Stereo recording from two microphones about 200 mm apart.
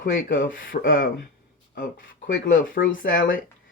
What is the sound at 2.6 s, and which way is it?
Speech, 45° left (ahead or behind).